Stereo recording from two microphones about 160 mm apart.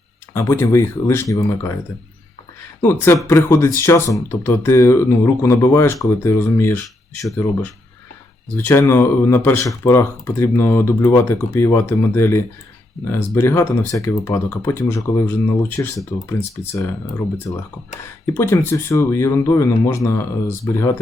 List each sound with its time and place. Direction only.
0.3 s speech: 15° left (ahead or behind)
2.8 s speech: 15° left (ahead or behind)
8.5 s speech: 15° left (ahead or behind)
18.3 s speech: 15° left (ahead or behind)